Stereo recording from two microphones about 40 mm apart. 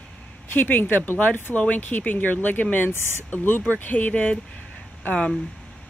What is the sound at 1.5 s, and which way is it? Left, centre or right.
Speech, left.